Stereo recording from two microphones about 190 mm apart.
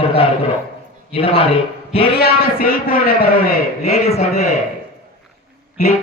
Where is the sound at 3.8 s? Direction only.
35° left (ahead or behind).